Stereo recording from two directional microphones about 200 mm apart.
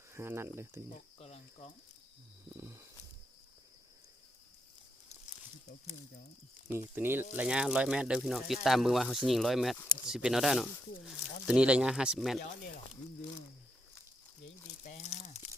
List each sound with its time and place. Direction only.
0.1 s speech: 10° right (ahead or behind)
1.2 s speech: 30° left (ahead or behind)
2.5 s speech: 15° right (ahead or behind)
6.9 s speech: 10° right (ahead or behind)
14.8 s speech: 35° left (ahead or behind)